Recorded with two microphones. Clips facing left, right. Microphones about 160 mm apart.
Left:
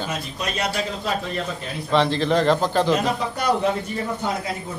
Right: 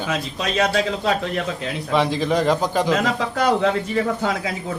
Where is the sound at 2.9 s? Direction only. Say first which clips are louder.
Right 2 dB; 90° right.